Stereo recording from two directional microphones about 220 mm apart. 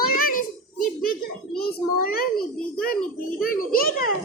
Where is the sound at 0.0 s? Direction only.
40° left (ahead or behind).